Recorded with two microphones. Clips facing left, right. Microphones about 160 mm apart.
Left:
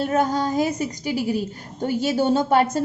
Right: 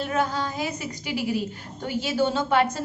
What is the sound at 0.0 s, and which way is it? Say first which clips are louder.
A woman's voice: left 5 dB; 40° left (ahead or behind).